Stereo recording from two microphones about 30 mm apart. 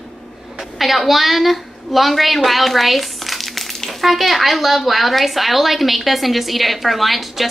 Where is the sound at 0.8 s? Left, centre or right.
Centre.